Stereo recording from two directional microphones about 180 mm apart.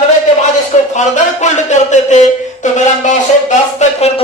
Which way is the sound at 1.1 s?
40° left (ahead or behind).